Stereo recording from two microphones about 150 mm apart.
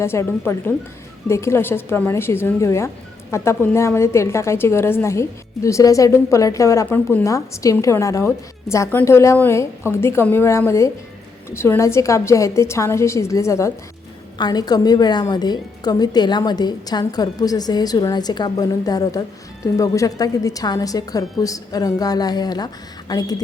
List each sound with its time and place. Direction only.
0.0 s a woman's voice: 15° left (ahead or behind)